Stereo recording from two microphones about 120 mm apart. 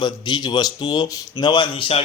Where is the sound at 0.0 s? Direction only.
40° left (ahead or behind).